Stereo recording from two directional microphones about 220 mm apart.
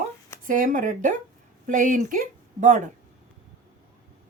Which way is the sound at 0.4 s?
35° right (ahead or behind).